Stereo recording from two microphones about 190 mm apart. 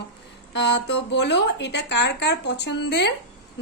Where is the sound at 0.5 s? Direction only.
65° left (ahead or behind).